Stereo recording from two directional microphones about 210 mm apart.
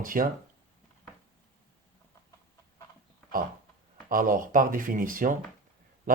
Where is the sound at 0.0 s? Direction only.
40° right (ahead or behind).